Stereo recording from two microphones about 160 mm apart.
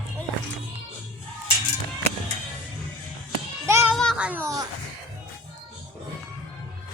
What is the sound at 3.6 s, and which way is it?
Children playing, 15° right (ahead or behind).